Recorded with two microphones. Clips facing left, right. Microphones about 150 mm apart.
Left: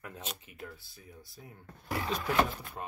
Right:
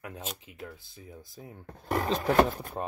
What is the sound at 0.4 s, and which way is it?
Speech, 15° right (ahead or behind).